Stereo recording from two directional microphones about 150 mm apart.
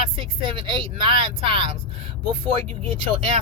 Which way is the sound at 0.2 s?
35° right (ahead or behind).